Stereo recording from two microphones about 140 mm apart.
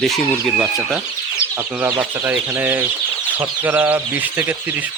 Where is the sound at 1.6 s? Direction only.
15° right (ahead or behind).